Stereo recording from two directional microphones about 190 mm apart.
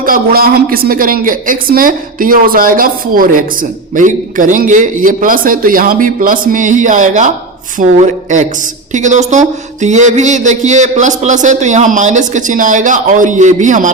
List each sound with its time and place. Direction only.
0.0 s a woman's voice: 50° right (ahead or behind)